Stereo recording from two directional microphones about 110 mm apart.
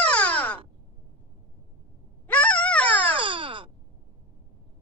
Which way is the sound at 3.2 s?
55° right (ahead or behind).